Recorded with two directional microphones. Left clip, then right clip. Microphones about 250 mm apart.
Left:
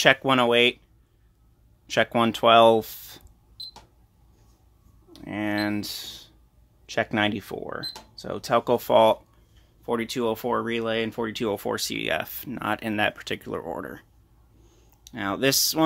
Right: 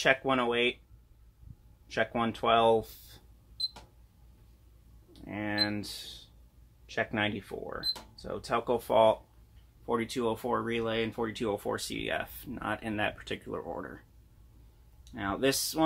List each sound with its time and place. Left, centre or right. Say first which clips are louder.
0.0 s speech: left 8 dB; left
1.9 s speech: left 8 dB; left
5.1 s speech: left 6 dB; left
15.0 s speech: left 5 dB; left